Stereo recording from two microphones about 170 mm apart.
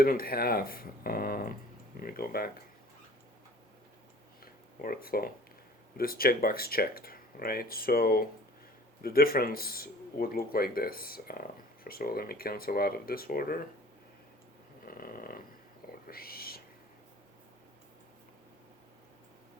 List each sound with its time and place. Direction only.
0.0 s speech: 60° left (ahead or behind)
4.8 s speech: 60° left (ahead or behind)
14.8 s snoring: 60° left (ahead or behind)
16.0 s whispering: 60° left (ahead or behind)